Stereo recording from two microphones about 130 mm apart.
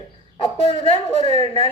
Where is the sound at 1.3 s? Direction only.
50° left (ahead or behind).